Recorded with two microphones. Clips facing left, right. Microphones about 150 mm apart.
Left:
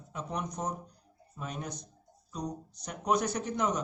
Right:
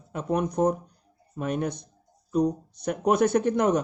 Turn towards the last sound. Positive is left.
turn(degrees=-55)  # may be behind; listen again after turning